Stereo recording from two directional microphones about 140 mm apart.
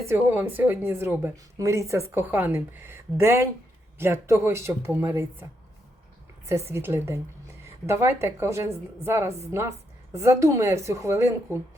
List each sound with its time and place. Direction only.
0.0 s a woman's voice: 15° right (ahead or behind)
6.7 s a woman's voice: 15° right (ahead or behind)